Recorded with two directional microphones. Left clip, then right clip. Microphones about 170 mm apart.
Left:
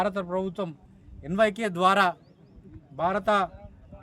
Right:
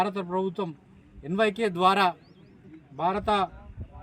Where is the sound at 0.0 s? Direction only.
30° left (ahead or behind).